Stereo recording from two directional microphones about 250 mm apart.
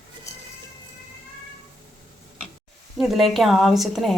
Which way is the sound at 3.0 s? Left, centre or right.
Centre.